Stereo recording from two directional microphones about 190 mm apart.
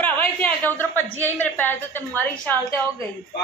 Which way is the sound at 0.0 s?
10° left (ahead or behind).